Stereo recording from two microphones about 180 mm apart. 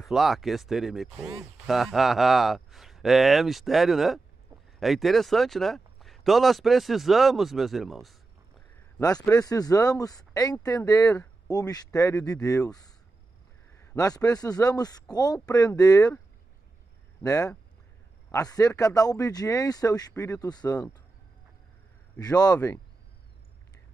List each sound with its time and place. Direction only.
0.0 s speech: centre (ahead or behind)
9.3 s speech: 20° left (ahead or behind)
17.2 s speech: 20° left (ahead or behind)
22.2 s speech: 20° left (ahead or behind)